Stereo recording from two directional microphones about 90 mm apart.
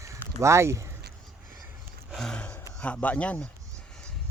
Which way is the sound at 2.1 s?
5° left (ahead or behind).